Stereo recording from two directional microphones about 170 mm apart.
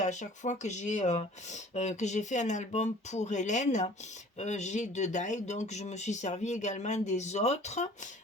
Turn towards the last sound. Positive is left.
turn(degrees=40)  # may be behind; listen again after turning